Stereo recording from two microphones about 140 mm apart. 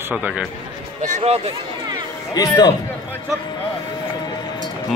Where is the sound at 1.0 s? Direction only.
55° right (ahead or behind).